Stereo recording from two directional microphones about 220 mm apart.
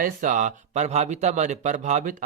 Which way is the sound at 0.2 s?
35° right (ahead or behind).